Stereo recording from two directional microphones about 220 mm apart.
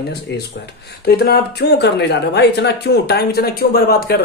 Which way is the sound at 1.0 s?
45° left (ahead or behind).